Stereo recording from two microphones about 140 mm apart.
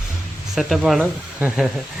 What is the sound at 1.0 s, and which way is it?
Speech, 15° right (ahead or behind).